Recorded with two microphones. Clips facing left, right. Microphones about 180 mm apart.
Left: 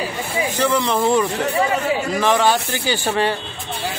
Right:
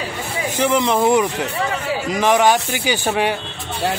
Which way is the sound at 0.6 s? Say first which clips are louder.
Right 3 dB; 15° right (ahead or behind).